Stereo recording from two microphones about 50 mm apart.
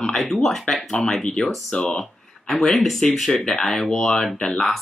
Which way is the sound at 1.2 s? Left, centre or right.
Centre.